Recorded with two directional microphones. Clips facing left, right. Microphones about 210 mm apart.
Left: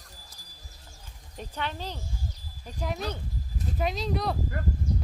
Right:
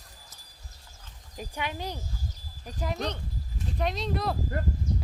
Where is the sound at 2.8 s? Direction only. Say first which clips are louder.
Right 1 dB; centre (ahead or behind).